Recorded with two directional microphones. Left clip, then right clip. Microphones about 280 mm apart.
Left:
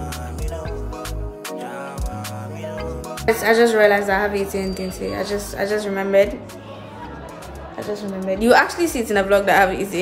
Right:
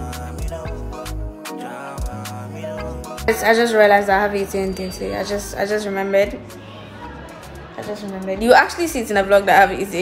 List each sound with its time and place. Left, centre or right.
0.0 s music: centre
3.4 s a woman's voice: centre
8.3 s a woman's voice: centre